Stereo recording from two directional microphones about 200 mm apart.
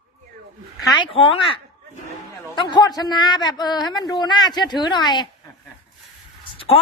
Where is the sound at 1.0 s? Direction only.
25° left (ahead or behind).